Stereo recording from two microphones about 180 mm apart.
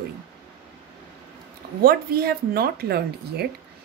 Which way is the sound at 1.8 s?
60° right (ahead or behind).